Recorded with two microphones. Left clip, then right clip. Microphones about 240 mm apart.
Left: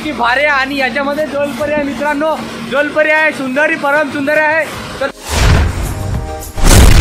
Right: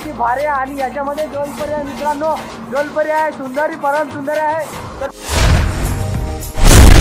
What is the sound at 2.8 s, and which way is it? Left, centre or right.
A man's voice, left.